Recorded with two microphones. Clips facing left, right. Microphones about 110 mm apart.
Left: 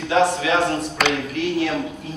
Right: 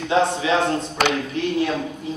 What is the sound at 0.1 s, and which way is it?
A man's voice, 25° right (ahead or behind).